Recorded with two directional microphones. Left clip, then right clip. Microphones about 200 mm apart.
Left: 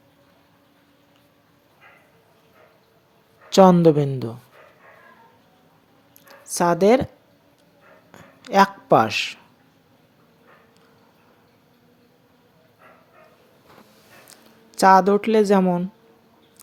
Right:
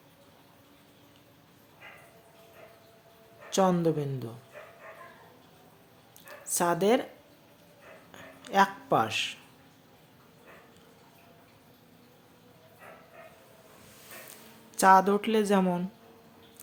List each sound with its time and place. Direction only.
3.5 s a woman's voice: 40° left (ahead or behind)
6.2 s speech: 30° left (ahead or behind)
8.1 s speech: 35° left (ahead or behind)
14.7 s a woman's voice: 35° left (ahead or behind)